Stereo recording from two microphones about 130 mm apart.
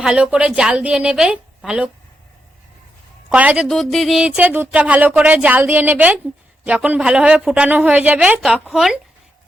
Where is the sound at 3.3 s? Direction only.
10° right (ahead or behind).